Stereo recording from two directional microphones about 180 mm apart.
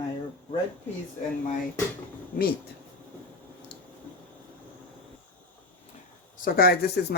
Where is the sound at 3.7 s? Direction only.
70° left (ahead or behind).